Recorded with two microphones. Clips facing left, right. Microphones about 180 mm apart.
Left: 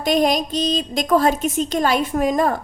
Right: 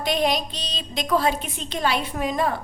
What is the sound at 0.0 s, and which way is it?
A woman's voice, 45° left (ahead or behind).